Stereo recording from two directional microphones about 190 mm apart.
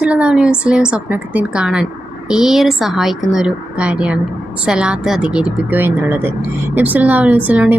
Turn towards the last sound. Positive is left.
turn(degrees=-10)  # may be behind; listen again after turning